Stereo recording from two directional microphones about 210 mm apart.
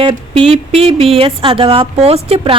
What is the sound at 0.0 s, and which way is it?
Speech, 25° right (ahead or behind).